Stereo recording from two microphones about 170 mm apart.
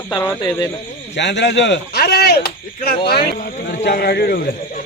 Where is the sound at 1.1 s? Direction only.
90° left; by 3.2 s 65° left (ahead or behind).